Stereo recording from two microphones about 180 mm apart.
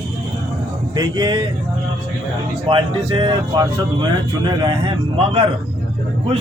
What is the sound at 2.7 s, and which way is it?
Speech, 30° right (ahead or behind).